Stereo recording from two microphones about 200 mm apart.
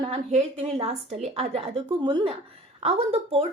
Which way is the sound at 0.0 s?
30° right (ahead or behind).